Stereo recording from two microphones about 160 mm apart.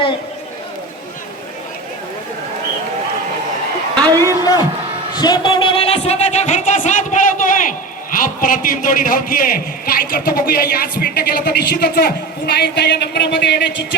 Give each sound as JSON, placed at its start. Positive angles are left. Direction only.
{"t": 4.0, "sound": "a sound", "side_deg": -20}
{"t": 5.2, "sound": "music", "side_deg": 25}
{"t": 6.0, "sound": "a man's voice", "side_deg": 45}
{"t": 12.5, "sound": "speech", "side_deg": 90}